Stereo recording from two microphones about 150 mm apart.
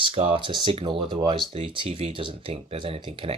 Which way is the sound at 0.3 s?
35° right (ahead or behind).